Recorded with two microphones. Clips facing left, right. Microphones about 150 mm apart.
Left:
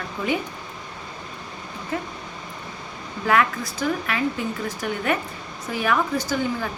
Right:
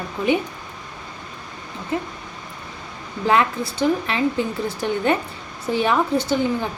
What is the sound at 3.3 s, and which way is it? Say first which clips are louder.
Speech: right 2 dB; 25° right (ahead or behind).